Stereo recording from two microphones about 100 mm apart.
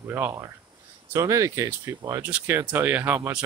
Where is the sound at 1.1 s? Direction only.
30° right (ahead or behind).